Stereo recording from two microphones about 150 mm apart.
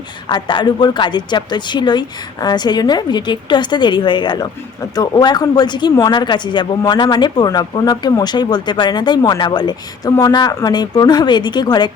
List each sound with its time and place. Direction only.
0.3 s a woman's voice: 30° left (ahead or behind)